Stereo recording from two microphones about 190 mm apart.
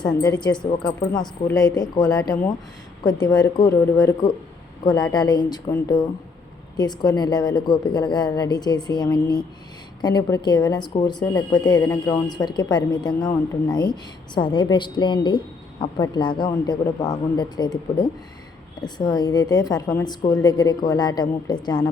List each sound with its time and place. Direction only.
0.0 s speech: 20° left (ahead or behind)